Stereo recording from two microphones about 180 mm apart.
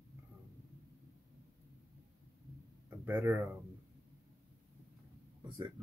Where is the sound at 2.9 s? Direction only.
10° right (ahead or behind).